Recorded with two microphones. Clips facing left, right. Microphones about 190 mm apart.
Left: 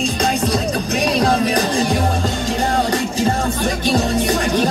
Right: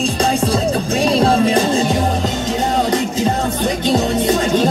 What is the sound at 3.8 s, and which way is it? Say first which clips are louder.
Music: right 2 dB; 20° right (ahead or behind).